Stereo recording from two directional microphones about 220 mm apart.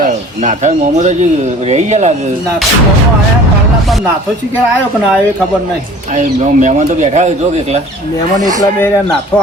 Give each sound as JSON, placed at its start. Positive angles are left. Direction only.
{"t": 0.0, "sound": "speech", "side_deg": -35}
{"t": 6.1, "sound": "speech", "side_deg": -35}